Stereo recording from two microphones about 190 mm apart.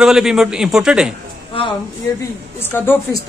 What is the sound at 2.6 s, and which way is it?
Speech, 10° left (ahead or behind).